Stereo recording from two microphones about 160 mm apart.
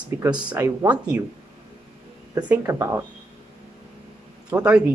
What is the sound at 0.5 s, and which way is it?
Speech, 10° right (ahead or behind).